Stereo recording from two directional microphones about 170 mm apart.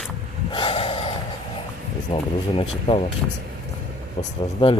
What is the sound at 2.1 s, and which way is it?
Speech, 30° left (ahead or behind).